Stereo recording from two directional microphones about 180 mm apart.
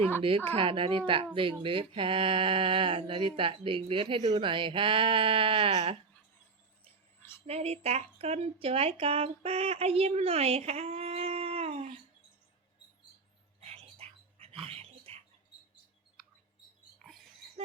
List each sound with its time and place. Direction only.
0.2 s speech: 30° right (ahead or behind)
7.4 s speech: 35° right (ahead or behind)
13.6 s dog: 35° right (ahead or behind)
17.0 s oink: centre (ahead or behind)